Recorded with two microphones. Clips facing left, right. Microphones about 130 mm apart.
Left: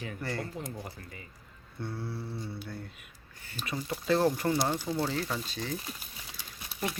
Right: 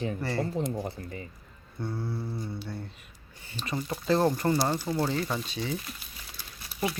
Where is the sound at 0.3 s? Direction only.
30° right (ahead or behind).